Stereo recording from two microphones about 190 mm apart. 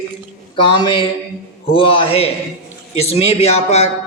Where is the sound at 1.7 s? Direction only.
30° left (ahead or behind).